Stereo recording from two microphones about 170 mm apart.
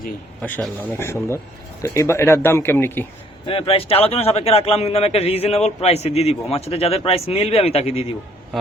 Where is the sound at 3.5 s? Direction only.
30° left (ahead or behind).